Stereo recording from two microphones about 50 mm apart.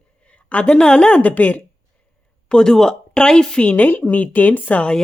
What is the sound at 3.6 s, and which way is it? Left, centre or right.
A woman's voice, left.